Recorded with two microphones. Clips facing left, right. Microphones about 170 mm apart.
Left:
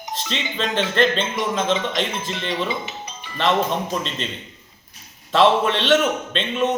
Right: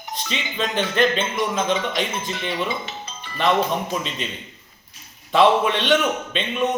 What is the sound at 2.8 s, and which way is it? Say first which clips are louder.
Music: left 1 dB; 15° left (ahead or behind).